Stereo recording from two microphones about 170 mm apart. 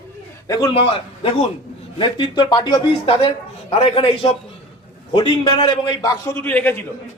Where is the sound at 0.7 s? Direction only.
35° left (ahead or behind).